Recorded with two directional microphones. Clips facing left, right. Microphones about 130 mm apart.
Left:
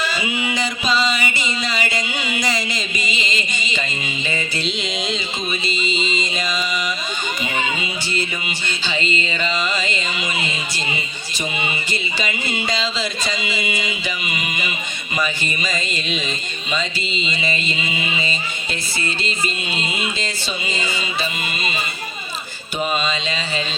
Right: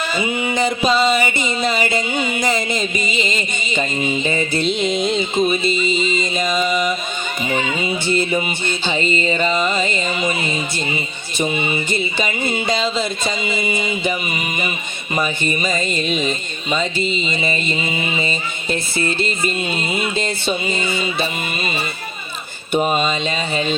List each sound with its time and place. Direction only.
0.0 s music: 50° right (ahead or behind)
1.2 s a sound: 50° right (ahead or behind)
4.5 s speech: 50° right (ahead or behind)
6.1 s mantra: 50° right (ahead or behind)
7.5 s a child's voice: 30° right (ahead or behind)
8.0 s speech: 55° right (ahead or behind)
8.9 s speech: 45° right (ahead or behind)
12.5 s speech: 50° right (ahead or behind)
16.0 s speech: 45° right (ahead or behind)
22.7 s speech: 50° right (ahead or behind)